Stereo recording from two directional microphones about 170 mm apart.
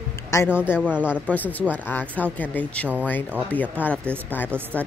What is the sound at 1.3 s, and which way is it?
Speech, 10° left (ahead or behind).